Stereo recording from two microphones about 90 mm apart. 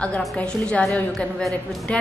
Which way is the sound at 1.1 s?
Centre (ahead or behind).